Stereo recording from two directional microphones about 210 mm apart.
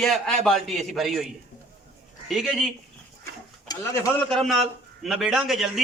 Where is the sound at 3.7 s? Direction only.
15° left (ahead or behind).